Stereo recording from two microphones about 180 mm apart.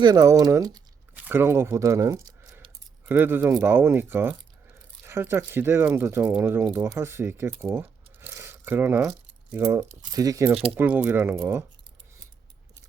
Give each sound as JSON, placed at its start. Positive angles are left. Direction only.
{"t": 0.0, "sound": "speech", "side_deg": -20}
{"t": 1.1, "sound": "speech", "side_deg": -10}